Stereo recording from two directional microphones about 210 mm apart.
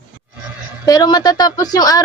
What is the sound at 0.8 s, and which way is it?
Speech, 20° left (ahead or behind).